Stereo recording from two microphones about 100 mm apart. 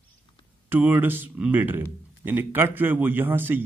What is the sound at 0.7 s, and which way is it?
Speech, 20° right (ahead or behind).